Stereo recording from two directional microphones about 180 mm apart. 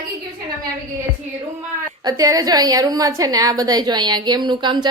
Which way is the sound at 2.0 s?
20° right (ahead or behind).